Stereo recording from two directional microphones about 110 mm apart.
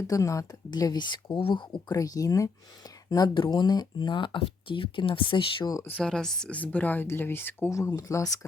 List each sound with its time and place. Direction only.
0.1 s speech: 30° left (ahead or behind); by 1.6 s 50° left (ahead or behind)
1.9 s speech: 35° left (ahead or behind); by 5.6 s 50° left (ahead or behind)
5.6 s speech: 30° left (ahead or behind)
5.9 s speech: 5° left (ahead or behind); by 8.4 s 30° left (ahead or behind)